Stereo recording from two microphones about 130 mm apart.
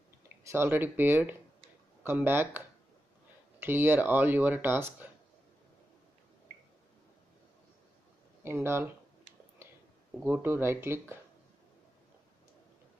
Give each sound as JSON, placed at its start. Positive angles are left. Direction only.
{"t": 0.4, "sound": "speech", "side_deg": -20}
{"t": 8.5, "sound": "speech", "side_deg": -20}
{"t": 10.2, "sound": "speech", "side_deg": -15}